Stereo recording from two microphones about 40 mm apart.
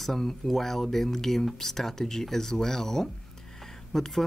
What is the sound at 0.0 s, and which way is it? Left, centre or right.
Speech, centre.